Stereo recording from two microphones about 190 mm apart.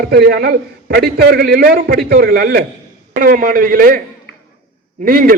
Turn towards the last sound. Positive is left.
turn(degrees=-50)  # may be behind; listen again after turning